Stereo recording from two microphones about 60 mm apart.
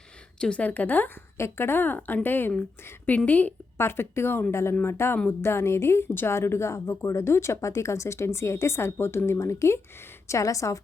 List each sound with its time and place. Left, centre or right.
0.3 s a woman's voice: centre
0.6 s speech: left
1.4 s a woman's voice: left
3.8 s a woman's voice: left